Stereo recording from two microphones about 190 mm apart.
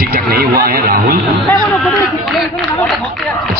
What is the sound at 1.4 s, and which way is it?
A man's voice, centre (ahead or behind).